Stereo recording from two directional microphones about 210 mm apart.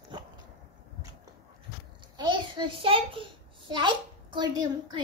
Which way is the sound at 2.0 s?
20° right (ahead or behind).